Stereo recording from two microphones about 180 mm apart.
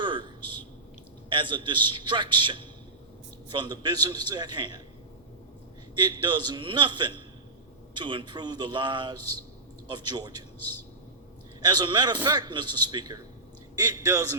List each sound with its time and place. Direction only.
0.0 s a sound: 25° right (ahead or behind)
1.3 s a man's voice: 25° right (ahead or behind)
6.0 s a man's voice: 25° right (ahead or behind)
11.6 s a man's voice: 25° right (ahead or behind)